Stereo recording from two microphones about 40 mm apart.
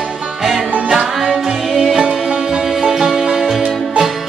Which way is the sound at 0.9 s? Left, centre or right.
Centre.